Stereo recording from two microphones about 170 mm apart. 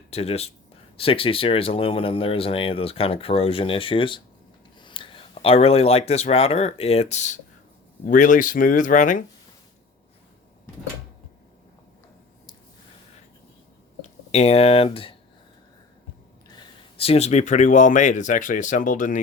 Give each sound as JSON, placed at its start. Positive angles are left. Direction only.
{"t": 0.1, "sound": "speech", "side_deg": 35}
{"t": 14.0, "sound": "speech", "side_deg": 40}
{"t": 16.5, "sound": "speech", "side_deg": 30}